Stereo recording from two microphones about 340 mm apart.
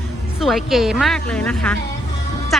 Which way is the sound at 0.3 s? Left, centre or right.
Centre.